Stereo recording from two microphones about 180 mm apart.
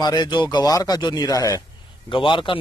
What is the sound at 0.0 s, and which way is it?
Speech, 25° left (ahead or behind).